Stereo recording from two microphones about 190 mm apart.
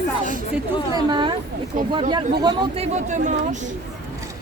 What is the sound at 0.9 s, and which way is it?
Speech, 25° right (ahead or behind).